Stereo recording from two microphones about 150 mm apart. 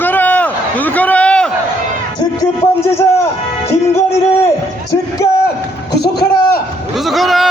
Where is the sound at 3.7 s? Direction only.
15° left (ahead or behind).